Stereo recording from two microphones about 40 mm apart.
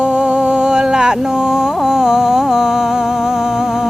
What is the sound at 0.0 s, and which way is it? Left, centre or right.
Music, right.